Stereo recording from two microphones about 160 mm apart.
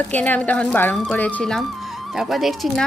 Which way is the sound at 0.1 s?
10° left (ahead or behind).